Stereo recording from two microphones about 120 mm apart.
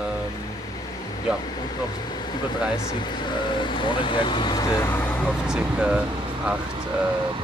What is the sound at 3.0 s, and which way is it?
Speech, 40° left (ahead or behind).